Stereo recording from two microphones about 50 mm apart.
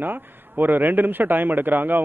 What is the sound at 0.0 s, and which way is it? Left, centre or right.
A man's voice, right.